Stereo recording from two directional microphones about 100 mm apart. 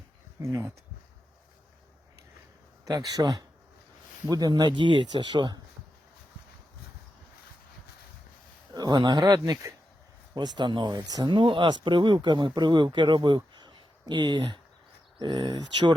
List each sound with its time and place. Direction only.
0.4 s speech: 30° right (ahead or behind)
2.8 s speech: 40° right (ahead or behind)
8.7 s speech: 45° right (ahead or behind)
11.3 s speech: 60° right (ahead or behind)